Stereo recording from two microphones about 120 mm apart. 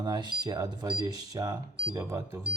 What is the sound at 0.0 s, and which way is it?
Speech, 35° right (ahead or behind).